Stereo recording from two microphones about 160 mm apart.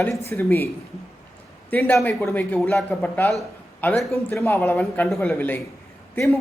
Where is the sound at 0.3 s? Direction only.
15° left (ahead or behind).